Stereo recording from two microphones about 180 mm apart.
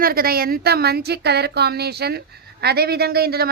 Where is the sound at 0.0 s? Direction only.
55° right (ahead or behind).